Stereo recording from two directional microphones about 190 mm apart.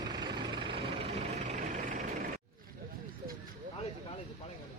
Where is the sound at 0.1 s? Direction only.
25° right (ahead or behind); by 2.0 s 40° right (ahead or behind).